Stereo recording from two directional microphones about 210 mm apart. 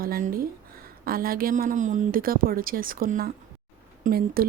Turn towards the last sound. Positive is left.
turn(degrees=-45)  # may be behind; listen again after turning